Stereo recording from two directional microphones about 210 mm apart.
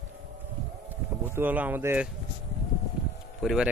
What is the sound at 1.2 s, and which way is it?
Speech, 10° right (ahead or behind).